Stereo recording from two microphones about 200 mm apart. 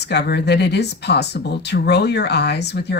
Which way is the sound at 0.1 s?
55° left (ahead or behind).